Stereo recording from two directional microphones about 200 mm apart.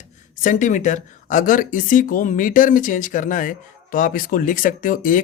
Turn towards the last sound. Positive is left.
turn(degrees=45)  # may be behind; listen again after turning